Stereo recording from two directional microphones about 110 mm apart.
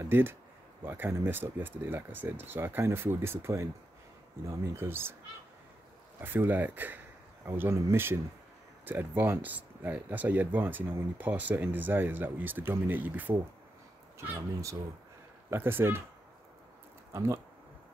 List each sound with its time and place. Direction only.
0.0 s speech: 20° right (ahead or behind)
6.2 s speech: 20° right (ahead or behind)
17.1 s speech: 25° right (ahead or behind)